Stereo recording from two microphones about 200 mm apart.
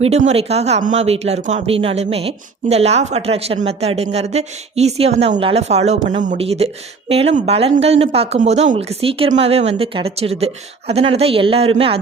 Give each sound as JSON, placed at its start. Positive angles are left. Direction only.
{"t": 0.0, "sound": "speech", "side_deg": -30}